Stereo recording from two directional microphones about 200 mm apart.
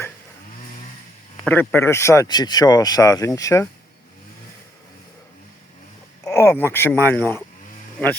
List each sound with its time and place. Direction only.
1.5 s speech: 10° left (ahead or behind)
6.2 s speech: 10° left (ahead or behind)